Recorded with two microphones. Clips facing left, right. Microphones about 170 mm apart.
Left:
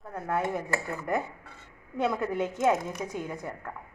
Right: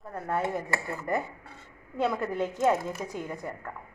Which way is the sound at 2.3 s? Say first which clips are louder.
Even; 20° left (ahead or behind).